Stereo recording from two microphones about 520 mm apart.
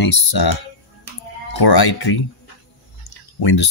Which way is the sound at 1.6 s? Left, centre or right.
Left.